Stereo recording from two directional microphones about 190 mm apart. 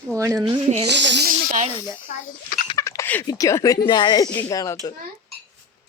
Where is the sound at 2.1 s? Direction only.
40° left (ahead or behind).